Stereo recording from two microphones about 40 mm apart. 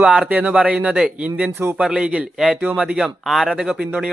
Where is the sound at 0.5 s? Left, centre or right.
Right.